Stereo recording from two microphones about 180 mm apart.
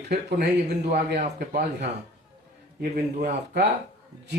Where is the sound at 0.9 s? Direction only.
45° right (ahead or behind).